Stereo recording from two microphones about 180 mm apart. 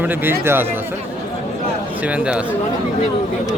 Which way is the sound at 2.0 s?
5° right (ahead or behind).